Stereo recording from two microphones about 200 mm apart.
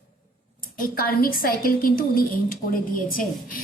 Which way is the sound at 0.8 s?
45° left (ahead or behind).